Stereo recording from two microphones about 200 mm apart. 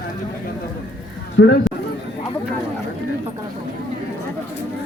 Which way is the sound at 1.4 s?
60° left (ahead or behind).